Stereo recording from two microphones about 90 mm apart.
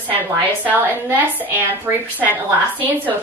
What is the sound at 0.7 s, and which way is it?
A woman's voice, 20° right (ahead or behind).